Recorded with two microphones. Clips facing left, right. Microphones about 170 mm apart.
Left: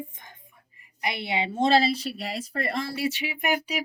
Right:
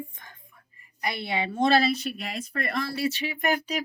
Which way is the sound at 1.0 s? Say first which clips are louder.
Left 1 dB; 15° left (ahead or behind).